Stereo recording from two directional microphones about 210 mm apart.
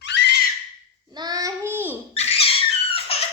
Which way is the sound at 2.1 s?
30° left (ahead or behind).